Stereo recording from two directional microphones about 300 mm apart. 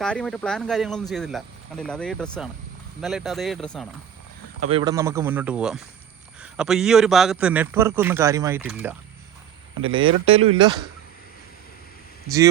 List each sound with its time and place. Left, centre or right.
0.0 s a man's voice: centre
4.6 s a man's voice: centre
9.8 s speech: centre